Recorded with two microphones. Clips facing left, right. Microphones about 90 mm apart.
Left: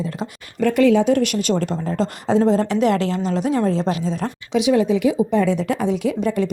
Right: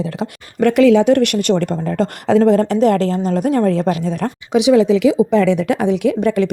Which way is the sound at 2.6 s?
40° right (ahead or behind).